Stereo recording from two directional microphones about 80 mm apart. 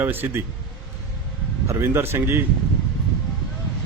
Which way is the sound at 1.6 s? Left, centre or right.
Right.